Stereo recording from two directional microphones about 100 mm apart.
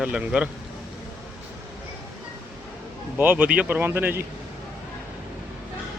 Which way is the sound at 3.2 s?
15° right (ahead or behind).